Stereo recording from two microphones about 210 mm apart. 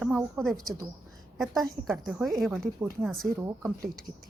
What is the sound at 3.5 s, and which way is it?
Speech, 15° right (ahead or behind).